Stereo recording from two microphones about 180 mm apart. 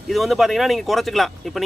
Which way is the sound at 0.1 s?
Centre (ahead or behind).